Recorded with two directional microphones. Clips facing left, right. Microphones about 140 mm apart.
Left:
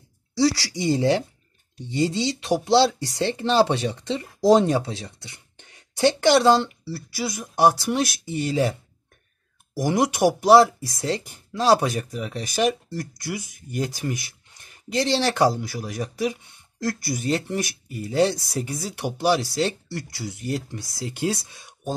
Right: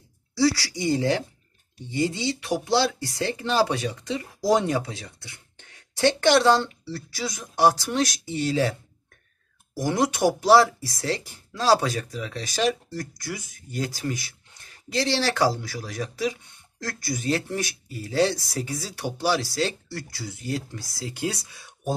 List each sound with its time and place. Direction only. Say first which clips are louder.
0.4 s speech: left 1 dB; 20° left (ahead or behind)
9.8 s speech: left 2 dB; 15° left (ahead or behind)